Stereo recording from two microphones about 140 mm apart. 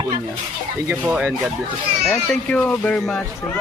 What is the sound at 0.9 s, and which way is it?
Speech, 10° right (ahead or behind).